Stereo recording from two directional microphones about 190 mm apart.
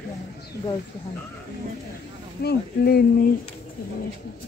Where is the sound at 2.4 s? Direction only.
55° left (ahead or behind).